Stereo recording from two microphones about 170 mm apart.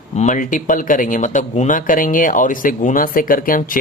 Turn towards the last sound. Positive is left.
turn(degrees=55)  # may be behind; listen again after turning